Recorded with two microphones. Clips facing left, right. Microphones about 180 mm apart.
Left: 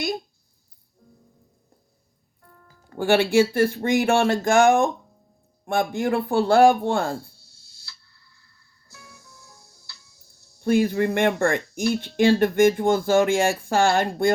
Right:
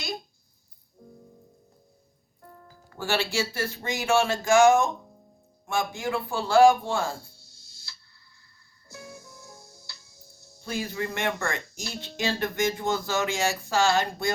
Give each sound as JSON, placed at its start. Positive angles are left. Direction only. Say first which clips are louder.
{"t": 3.0, "sound": "speech", "louder": "left 10 dB", "side_deg": 55}
{"t": 8.9, "sound": "music", "louder": "right 7 dB", "side_deg": -20}
{"t": 10.6, "sound": "speech", "louder": "left 11 dB", "side_deg": 55}